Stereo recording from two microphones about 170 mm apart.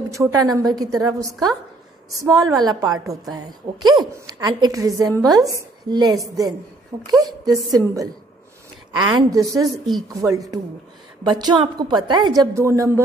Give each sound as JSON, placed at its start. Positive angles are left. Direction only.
{"t": 0.1, "sound": "a woman's voice", "side_deg": -20}